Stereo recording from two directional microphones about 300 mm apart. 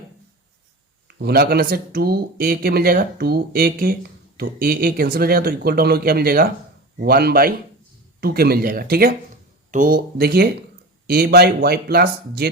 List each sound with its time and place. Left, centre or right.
1.0 s speech: right